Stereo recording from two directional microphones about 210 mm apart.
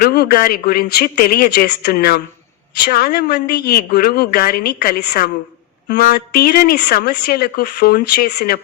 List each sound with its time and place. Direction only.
0.0 s speech: 45° left (ahead or behind)